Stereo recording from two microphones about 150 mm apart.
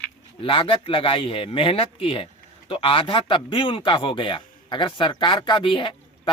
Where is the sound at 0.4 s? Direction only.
35° left (ahead or behind).